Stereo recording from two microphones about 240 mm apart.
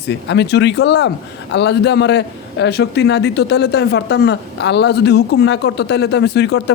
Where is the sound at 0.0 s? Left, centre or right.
Left.